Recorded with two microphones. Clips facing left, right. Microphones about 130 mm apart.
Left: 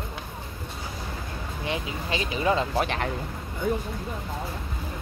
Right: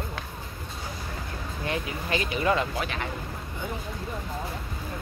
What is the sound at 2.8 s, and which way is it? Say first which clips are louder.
Speech: left 5 dB; 45° left (ahead or behind).